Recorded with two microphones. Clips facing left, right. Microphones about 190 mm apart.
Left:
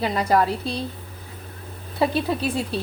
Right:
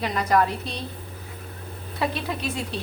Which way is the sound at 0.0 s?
30° left (ahead or behind).